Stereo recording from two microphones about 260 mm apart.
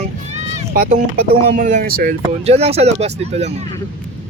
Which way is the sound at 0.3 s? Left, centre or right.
Right.